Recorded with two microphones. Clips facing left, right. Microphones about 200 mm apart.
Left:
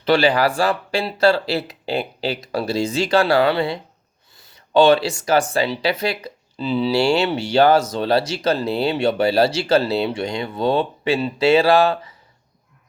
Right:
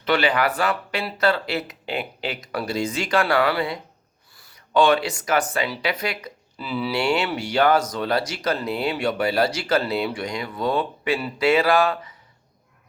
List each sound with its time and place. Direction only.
0.0 s speech: 30° left (ahead or behind)